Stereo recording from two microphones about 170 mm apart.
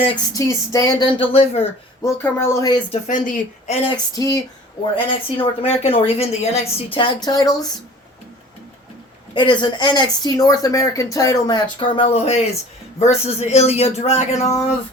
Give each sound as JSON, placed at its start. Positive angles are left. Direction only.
{"t": 0.1, "sound": "speech", "side_deg": 20}
{"t": 1.2, "sound": "speech", "side_deg": 35}
{"t": 2.0, "sound": "speech", "side_deg": 15}
{"t": 2.9, "sound": "a woman's voice", "side_deg": 50}
{"t": 3.8, "sound": "speech", "side_deg": 20}
{"t": 9.3, "sound": "speech", "side_deg": 25}